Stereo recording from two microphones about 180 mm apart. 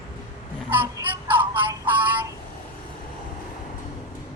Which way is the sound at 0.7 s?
10° right (ahead or behind).